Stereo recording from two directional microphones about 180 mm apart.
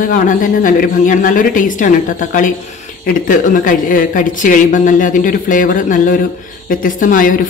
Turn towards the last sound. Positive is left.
turn(degrees=50)  # may be behind; listen again after turning